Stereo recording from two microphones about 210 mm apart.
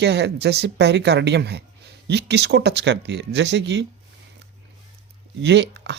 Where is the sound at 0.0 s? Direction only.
55° right (ahead or behind).